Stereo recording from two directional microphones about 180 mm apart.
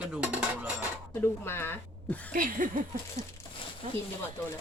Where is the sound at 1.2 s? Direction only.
15° left (ahead or behind).